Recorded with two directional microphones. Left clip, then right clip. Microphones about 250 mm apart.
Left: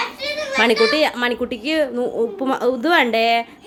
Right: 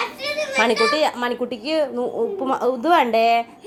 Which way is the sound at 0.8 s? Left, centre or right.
Left.